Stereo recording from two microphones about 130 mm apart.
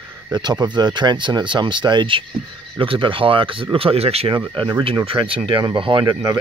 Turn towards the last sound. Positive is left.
turn(degrees=-35)  # may be behind; listen again after turning